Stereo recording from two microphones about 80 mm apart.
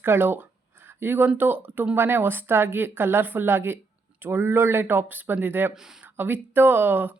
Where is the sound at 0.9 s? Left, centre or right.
Right.